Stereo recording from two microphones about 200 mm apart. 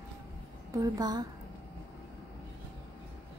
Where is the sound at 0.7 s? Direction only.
20° right (ahead or behind).